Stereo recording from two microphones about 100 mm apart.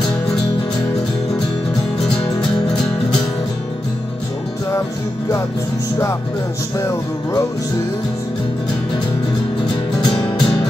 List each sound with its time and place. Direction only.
2.7 s music: 5° left (ahead or behind)
6.8 s music: 30° left (ahead or behind)
10.0 s music: 45° left (ahead or behind)